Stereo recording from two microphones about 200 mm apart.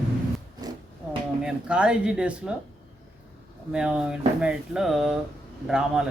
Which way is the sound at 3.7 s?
5° right (ahead or behind).